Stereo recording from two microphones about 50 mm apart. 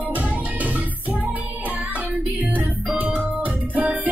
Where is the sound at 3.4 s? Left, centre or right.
Right.